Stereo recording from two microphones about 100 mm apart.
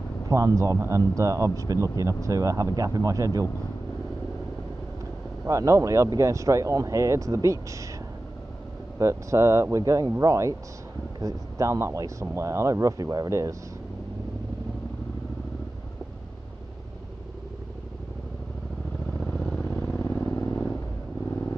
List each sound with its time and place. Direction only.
0.6 s speech: 30° right (ahead or behind)
5.4 s speech: 30° right (ahead or behind)
8.9 s speech: 30° right (ahead or behind)
19.1 s vehicle: 5° left (ahead or behind)
19.7 s vehicle: 30° left (ahead or behind)